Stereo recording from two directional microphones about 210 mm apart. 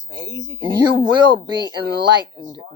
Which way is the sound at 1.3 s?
20° right (ahead or behind).